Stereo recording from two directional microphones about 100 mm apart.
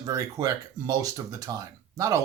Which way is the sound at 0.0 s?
35° right (ahead or behind).